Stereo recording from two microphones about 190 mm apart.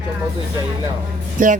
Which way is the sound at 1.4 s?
45° right (ahead or behind).